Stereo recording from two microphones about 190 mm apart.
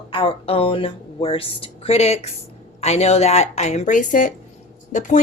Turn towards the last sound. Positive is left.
turn(degrees=40)  # may be behind; listen again after turning